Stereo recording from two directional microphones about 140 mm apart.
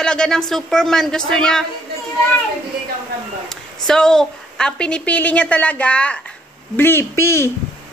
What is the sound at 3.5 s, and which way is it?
Speech, 5° left (ahead or behind).